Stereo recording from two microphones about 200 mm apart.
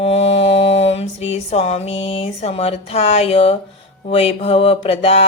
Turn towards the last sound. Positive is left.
turn(degrees=30)  # may be behind; listen again after turning